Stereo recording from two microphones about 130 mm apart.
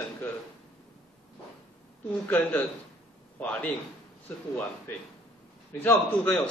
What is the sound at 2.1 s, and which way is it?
A man's voice, 10° left (ahead or behind).